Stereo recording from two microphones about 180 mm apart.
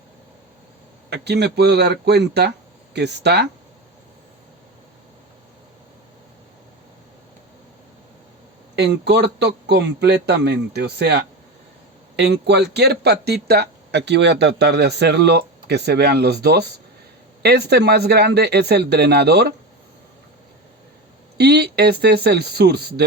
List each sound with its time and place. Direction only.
1.1 s a man's voice: 65° right (ahead or behind)
8.7 s a man's voice: 65° right (ahead or behind)
21.3 s speech: 65° right (ahead or behind)